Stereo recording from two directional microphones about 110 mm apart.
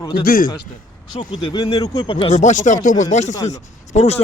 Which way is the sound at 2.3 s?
90° left.